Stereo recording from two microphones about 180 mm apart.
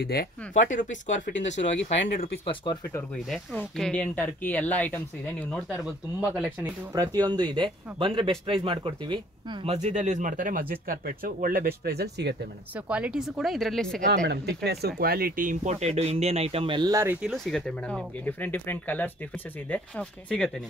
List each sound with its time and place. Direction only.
0.0 s speech: 60° left (ahead or behind)
0.6 s speech: 45° left (ahead or behind)
1.8 s speech: 75° left (ahead or behind)
2.4 s speech: 25° left (ahead or behind)
3.3 s speech: centre (ahead or behind)
6.2 s speech: 5° right (ahead or behind)
6.6 s speech: 20° right (ahead or behind); by 12.4 s 65° right (ahead or behind)
12.7 s speech: 5° right (ahead or behind)
14.2 s speech: 65° right (ahead or behind); by 20.5 s 5° left (ahead or behind)